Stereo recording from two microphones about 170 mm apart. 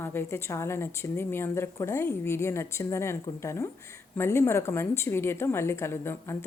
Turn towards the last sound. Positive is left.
turn(degrees=15)  # may be behind; listen again after turning